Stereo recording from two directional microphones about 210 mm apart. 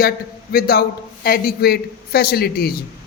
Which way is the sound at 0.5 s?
45° left (ahead or behind).